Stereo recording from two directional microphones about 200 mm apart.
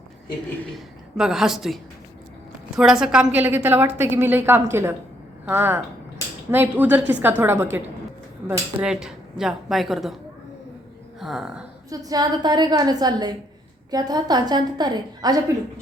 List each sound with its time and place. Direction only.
1.1 s a woman's voice: centre (ahead or behind)
11.2 s speech: centre (ahead or behind)
11.9 s a woman's voice: 20° right (ahead or behind)